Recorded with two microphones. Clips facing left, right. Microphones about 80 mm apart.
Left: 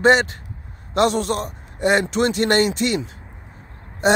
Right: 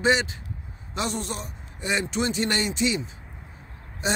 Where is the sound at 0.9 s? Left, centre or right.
Left.